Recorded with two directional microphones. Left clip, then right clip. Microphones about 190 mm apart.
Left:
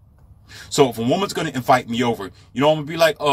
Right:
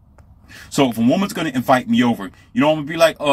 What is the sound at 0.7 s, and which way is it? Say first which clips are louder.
A man's voice: even; 15° right (ahead or behind).